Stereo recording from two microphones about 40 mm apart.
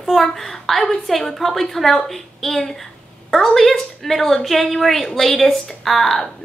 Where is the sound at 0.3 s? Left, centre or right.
Centre.